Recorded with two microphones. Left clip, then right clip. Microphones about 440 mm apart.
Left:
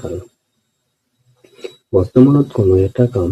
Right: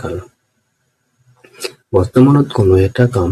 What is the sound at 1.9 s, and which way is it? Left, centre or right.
Speech, left.